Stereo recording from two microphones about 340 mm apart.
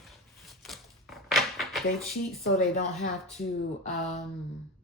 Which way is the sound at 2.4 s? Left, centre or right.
Left.